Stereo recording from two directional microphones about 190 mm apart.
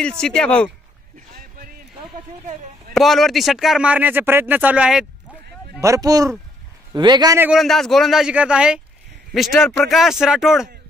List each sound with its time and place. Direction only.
0.2 s speech: 5° left (ahead or behind)
2.9 s speech: centre (ahead or behind)
5.8 s a man's voice: 15° right (ahead or behind)
7.4 s speech: centre (ahead or behind)